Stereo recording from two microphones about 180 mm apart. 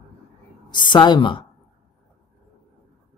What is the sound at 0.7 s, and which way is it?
Speech, 25° left (ahead or behind).